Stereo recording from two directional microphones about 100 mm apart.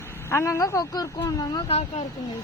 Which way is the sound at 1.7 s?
90° left.